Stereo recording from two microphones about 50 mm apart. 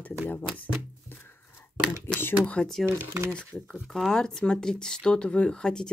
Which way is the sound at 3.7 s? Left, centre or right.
Centre.